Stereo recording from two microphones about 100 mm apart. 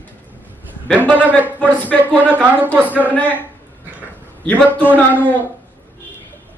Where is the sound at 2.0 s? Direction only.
15° right (ahead or behind).